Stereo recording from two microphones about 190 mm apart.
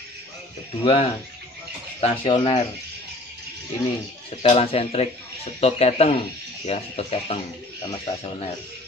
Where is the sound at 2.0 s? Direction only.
30° left (ahead or behind).